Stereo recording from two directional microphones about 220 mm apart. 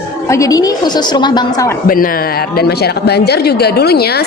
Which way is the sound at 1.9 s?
40° left (ahead or behind).